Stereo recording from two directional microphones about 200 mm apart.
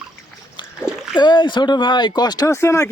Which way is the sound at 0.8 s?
5° right (ahead or behind).